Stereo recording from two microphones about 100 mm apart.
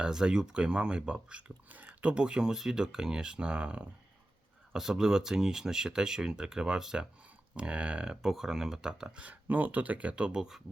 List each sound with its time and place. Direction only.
0.0 s speech: 5° right (ahead or behind)